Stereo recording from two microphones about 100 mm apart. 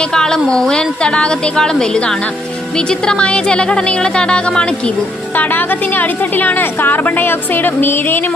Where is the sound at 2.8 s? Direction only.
10° left (ahead or behind).